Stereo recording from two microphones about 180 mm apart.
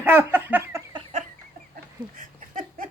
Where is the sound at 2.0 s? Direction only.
25° right (ahead or behind).